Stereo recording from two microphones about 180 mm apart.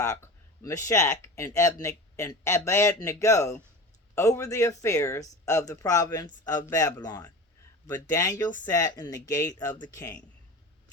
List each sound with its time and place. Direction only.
0.0 s speech: 15° left (ahead or behind)